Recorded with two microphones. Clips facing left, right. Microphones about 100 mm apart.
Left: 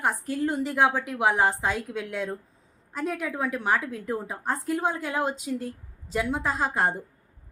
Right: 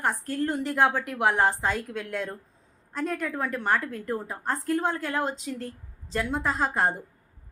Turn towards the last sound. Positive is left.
turn(degrees=0)  # may be behind; listen again after turning